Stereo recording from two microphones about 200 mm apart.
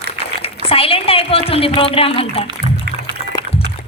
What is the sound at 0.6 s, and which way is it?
A woman's voice, 30° left (ahead or behind).